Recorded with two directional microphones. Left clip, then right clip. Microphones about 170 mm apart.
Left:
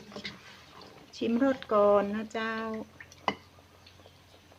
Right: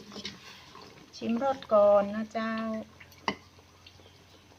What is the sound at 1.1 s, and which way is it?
Speech, 65° left (ahead or behind).